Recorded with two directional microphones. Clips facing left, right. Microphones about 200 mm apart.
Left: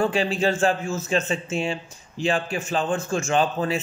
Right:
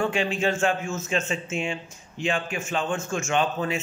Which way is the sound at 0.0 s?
35° left (ahead or behind).